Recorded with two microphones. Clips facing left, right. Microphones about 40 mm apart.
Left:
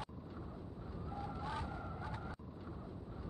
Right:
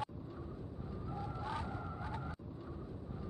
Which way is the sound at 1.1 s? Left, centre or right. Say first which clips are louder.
Right 1 dB; centre.